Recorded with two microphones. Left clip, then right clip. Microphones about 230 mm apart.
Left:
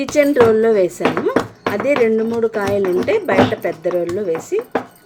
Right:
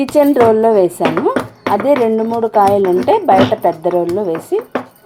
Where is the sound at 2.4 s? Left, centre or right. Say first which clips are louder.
Right 7 dB; right.